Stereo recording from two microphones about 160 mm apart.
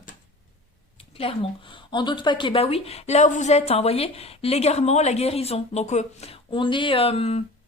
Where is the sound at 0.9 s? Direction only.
35° left (ahead or behind).